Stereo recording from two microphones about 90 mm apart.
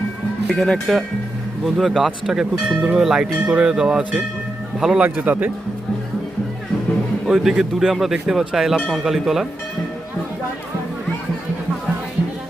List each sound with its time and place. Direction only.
0.4 s speech: centre (ahead or behind)
5.0 s a man's voice: 20° right (ahead or behind)
7.3 s speech: 5° right (ahead or behind)